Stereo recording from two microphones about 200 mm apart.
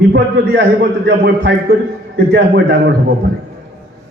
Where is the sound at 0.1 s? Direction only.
55° right (ahead or behind).